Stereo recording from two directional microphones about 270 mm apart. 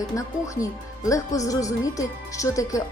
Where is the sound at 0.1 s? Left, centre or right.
Centre.